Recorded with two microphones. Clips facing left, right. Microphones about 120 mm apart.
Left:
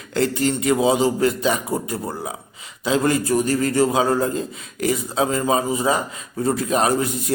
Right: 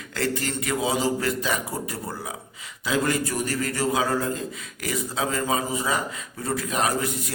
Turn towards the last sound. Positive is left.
turn(degrees=25)  # may be behind; listen again after turning